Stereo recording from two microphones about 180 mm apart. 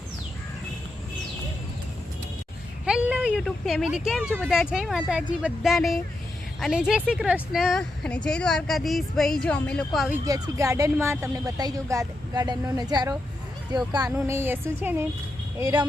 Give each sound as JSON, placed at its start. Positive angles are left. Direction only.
{"t": 2.8, "sound": "speech", "side_deg": -5}
{"t": 10.2, "sound": "speech", "side_deg": -20}